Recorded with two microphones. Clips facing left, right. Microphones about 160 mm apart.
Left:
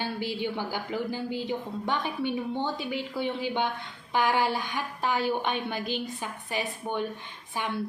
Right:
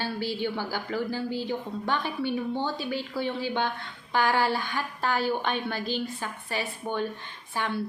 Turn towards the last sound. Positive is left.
turn(degrees=15)  # may be behind; listen again after turning